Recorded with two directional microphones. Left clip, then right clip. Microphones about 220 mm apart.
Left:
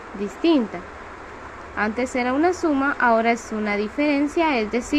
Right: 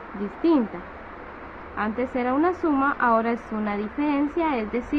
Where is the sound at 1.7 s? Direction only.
10° left (ahead or behind).